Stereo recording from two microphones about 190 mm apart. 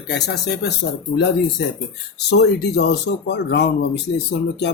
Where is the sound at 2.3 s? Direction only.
65° left (ahead or behind).